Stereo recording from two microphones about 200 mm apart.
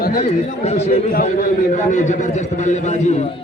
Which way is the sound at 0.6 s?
35° left (ahead or behind).